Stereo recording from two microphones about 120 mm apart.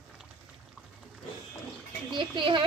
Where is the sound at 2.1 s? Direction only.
45° right (ahead or behind).